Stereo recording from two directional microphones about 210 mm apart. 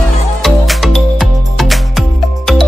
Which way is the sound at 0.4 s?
Centre (ahead or behind).